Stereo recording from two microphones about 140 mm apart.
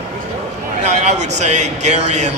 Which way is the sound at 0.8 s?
55° right (ahead or behind).